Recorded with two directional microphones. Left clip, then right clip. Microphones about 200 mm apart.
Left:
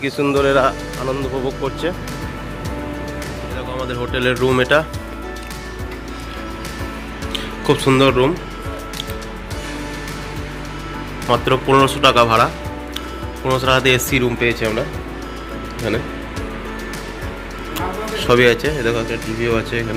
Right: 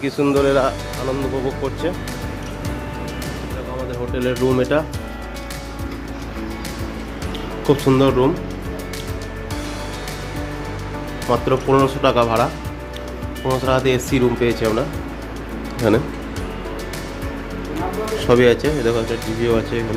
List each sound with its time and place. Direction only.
0.0 s speech: 15° right (ahead or behind)
4.1 s speech: centre (ahead or behind)
7.3 s speech: 15° right (ahead or behind)
11.3 s speech: 5° right (ahead or behind)
13.5 s speech: 5° right (ahead or behind)
14.2 s speech: 20° right (ahead or behind)
18.2 s speech: 15° right (ahead or behind)